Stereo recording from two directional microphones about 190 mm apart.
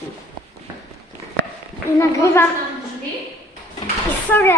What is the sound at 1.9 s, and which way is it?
Speech, 15° left (ahead or behind).